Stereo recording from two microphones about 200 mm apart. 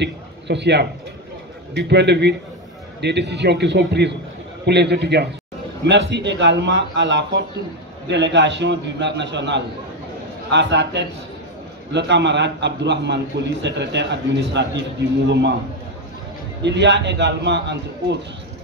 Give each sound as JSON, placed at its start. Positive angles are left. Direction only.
{"t": 0.0, "sound": "a sound", "side_deg": -60}
{"t": 1.7, "sound": "a man's voice", "side_deg": -55}
{"t": 16.6, "sound": "a man's voice", "side_deg": -60}